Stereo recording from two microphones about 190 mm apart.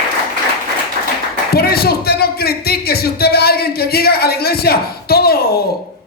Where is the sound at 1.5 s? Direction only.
55° left (ahead or behind).